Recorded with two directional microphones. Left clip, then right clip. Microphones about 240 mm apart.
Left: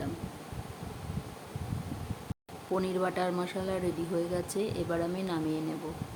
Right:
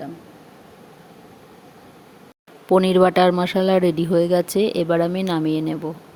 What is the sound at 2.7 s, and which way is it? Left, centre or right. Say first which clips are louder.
Speech: right 16 dB; right.